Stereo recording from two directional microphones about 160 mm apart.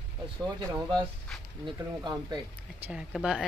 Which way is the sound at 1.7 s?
25° right (ahead or behind).